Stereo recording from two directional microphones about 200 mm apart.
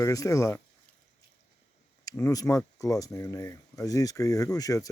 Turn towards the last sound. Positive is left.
turn(degrees=15)  # may be behind; listen again after turning